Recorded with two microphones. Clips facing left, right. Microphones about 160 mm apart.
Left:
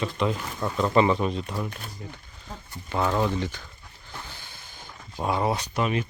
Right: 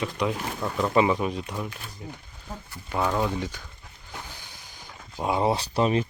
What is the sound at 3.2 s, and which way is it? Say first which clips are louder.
Speech: left 1 dB; 10° right (ahead or behind).